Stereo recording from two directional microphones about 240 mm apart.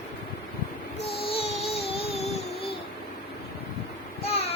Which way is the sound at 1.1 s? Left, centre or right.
Left.